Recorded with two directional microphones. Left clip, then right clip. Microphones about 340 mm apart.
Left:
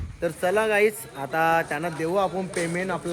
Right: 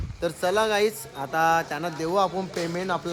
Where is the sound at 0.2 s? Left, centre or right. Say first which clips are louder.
Even; centre.